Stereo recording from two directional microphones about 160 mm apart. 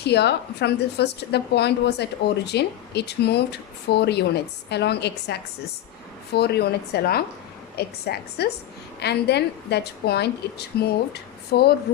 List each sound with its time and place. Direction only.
0.0 s speech: 90° left
7.8 s a woman's voice: 85° left